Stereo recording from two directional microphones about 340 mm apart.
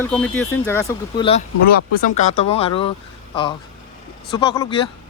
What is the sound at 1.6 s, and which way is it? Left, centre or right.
Speech, left.